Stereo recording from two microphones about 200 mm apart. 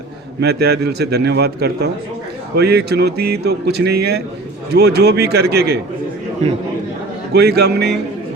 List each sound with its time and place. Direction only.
0.4 s a man's voice: 55° right (ahead or behind)
6.4 s a man's voice: 35° right (ahead or behind)
7.3 s speech: 55° right (ahead or behind)